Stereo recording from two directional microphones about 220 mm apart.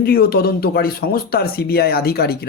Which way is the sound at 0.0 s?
45° left (ahead or behind).